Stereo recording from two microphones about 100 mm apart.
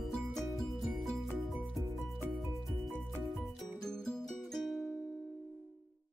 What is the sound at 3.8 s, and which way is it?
Music, 5° left (ahead or behind).